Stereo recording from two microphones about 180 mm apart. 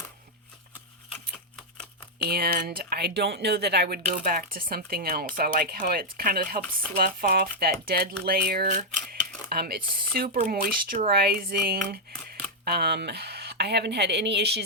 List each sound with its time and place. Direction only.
2.1 s speech: 60° right (ahead or behind)